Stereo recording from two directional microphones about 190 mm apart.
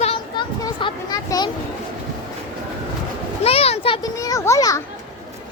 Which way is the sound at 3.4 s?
30° left (ahead or behind).